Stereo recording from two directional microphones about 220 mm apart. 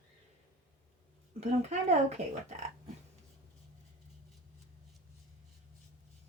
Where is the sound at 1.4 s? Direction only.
30° right (ahead or behind).